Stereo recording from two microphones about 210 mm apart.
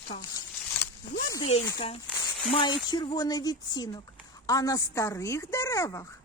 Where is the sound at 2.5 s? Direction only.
25° left (ahead or behind).